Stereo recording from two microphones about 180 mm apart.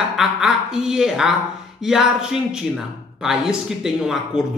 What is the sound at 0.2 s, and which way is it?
A woman's voice, centre (ahead or behind).